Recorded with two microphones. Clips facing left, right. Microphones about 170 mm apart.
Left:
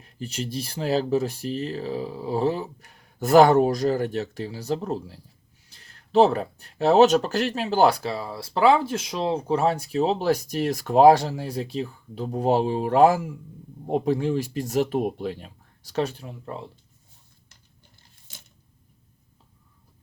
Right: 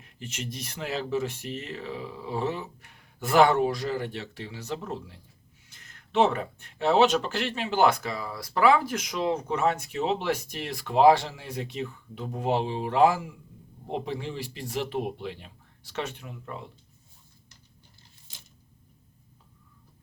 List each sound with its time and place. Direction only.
0.0 s speech: 35° left (ahead or behind)